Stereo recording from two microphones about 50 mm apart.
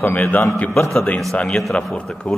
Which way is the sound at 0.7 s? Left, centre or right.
Centre.